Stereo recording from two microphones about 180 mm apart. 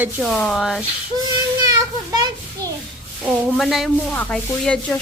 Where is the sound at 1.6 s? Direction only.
20° right (ahead or behind).